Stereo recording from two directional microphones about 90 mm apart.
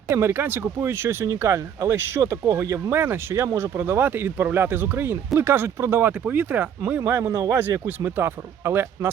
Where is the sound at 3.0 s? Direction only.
25° right (ahead or behind).